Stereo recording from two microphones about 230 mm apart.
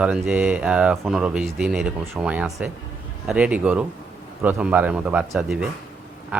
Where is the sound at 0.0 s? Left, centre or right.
Centre.